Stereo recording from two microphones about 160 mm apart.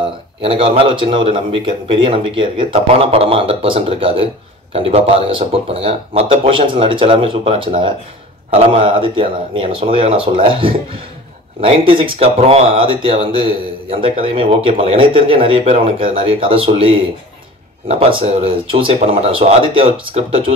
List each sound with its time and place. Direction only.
0.4 s speech: 35° right (ahead or behind)